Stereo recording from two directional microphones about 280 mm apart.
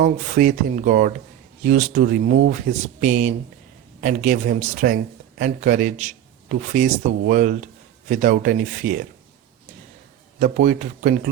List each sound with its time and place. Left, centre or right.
0.0 s a man's voice: right
10.4 s a man's voice: right